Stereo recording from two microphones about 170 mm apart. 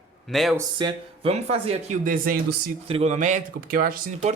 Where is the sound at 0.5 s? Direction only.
25° right (ahead or behind).